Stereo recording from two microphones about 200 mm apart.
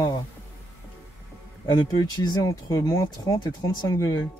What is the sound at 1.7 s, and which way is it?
Speech, 20° left (ahead or behind).